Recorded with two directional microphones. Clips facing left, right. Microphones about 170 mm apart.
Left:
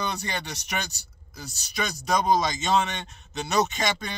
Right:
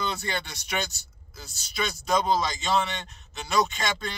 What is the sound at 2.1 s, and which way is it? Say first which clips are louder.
A man's voice: left 2 dB; 15° left (ahead or behind).